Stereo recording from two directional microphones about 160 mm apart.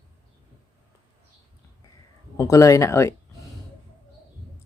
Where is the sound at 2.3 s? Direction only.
20° left (ahead or behind).